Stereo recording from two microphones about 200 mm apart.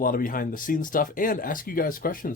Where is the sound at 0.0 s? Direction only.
45° left (ahead or behind).